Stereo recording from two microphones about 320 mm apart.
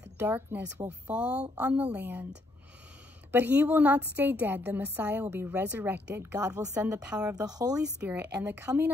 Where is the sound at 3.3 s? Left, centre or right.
Centre.